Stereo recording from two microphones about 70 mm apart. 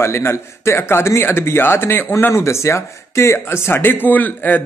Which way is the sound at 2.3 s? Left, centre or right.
Left.